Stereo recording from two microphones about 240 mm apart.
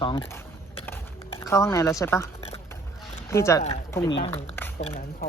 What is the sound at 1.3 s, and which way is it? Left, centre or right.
Speech, centre.